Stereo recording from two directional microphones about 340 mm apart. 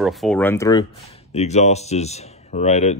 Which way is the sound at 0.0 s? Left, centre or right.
Centre.